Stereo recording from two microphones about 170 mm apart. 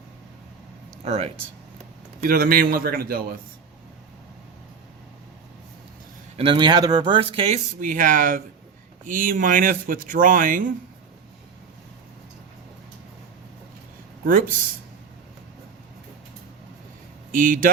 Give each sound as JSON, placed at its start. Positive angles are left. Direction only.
{"t": 1.0, "sound": "speech", "side_deg": -40}
{"t": 2.2, "sound": "a man's voice", "side_deg": -60}
{"t": 6.3, "sound": "speech", "side_deg": -30}
{"t": 7.8, "sound": "speech", "side_deg": -50}
{"t": 14.3, "sound": "speech", "side_deg": -55}
{"t": 17.3, "sound": "speech", "side_deg": -50}